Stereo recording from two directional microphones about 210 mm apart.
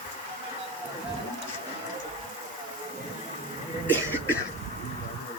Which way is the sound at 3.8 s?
10° left (ahead or behind).